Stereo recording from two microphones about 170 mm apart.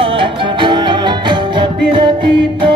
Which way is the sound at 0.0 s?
30° right (ahead or behind).